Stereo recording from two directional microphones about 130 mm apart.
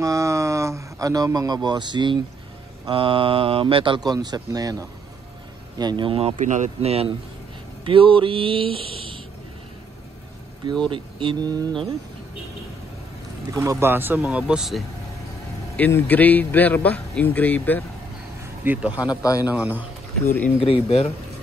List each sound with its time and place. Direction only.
0.0 s a sound: 25° right (ahead or behind)
2.9 s speech: 40° right (ahead or behind)
6.4 s speech: 65° right (ahead or behind); by 9.2 s 45° right (ahead or behind)
10.9 s speech: 40° right (ahead or behind)
13.5 s speech: 25° right (ahead or behind); by 14.8 s 5° right (ahead or behind)
15.7 s a man's voice: 15° left (ahead or behind)
18.6 s speech: 15° right (ahead or behind)
19.0 s speech: 25° left (ahead or behind)
19.4 s speech: 15° right (ahead or behind)
20.6 s speech: 45° left (ahead or behind)